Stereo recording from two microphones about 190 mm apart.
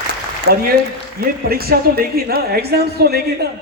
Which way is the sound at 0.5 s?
55° right (ahead or behind).